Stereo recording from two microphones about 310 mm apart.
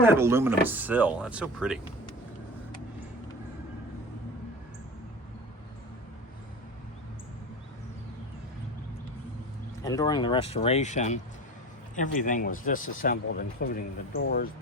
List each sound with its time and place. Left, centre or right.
0.0 s speech: centre
9.8 s speech: centre; by 14.5 s left